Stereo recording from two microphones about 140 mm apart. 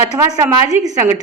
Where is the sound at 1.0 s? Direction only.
20° right (ahead or behind).